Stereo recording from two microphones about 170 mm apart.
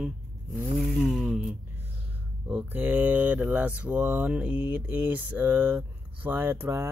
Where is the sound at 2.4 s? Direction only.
10° right (ahead or behind).